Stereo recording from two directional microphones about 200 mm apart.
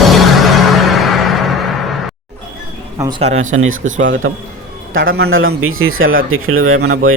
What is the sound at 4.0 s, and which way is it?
Speech, 70° right (ahead or behind).